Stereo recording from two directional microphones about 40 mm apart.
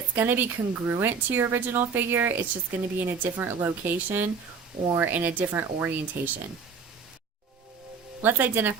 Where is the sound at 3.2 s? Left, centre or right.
Right.